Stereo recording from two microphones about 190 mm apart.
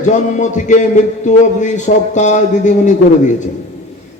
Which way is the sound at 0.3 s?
40° left (ahead or behind).